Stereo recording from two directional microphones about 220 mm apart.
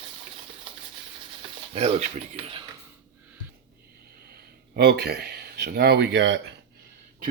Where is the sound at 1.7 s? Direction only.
30° right (ahead or behind).